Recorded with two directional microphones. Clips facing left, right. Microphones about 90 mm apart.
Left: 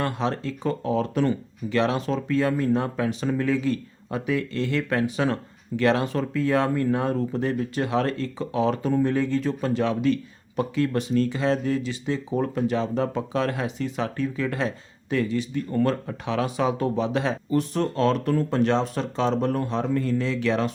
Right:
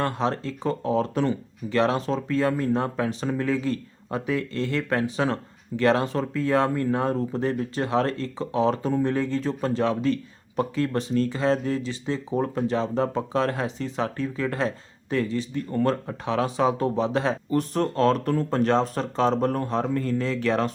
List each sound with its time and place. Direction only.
0.0 s speech: 35° right (ahead or behind)